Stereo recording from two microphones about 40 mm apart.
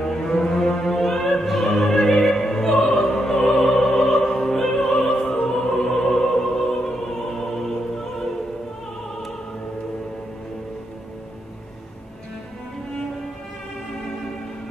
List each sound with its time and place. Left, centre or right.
0.0 s music: centre
1.9 s opera: centre
5.2 s opera: centre